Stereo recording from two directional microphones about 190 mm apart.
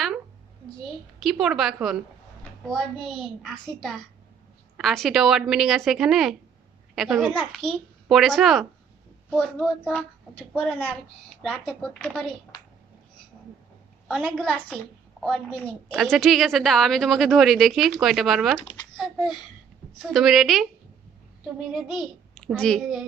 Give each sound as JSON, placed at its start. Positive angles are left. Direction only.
{"t": 1.2, "sound": "a woman's voice", "side_deg": 0}
{"t": 14.1, "sound": "a woman's voice", "side_deg": 0}
{"t": 21.7, "sound": "a child's voice", "side_deg": 0}